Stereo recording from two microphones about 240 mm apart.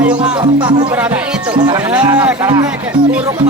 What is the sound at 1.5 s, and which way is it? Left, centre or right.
Speech, centre.